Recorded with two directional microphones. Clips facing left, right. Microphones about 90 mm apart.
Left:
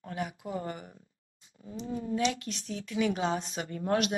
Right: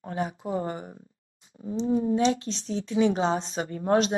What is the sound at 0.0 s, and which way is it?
Speech, 30° right (ahead or behind).